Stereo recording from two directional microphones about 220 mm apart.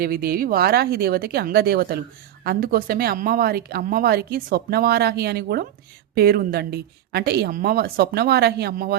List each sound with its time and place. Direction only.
0.0 s a woman's voice: 45° right (ahead or behind)